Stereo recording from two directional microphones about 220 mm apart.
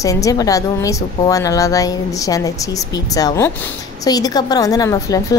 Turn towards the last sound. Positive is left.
turn(degrees=15)  # may be behind; listen again after turning